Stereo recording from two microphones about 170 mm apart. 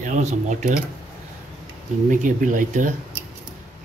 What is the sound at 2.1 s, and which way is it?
Speech, 50° right (ahead or behind).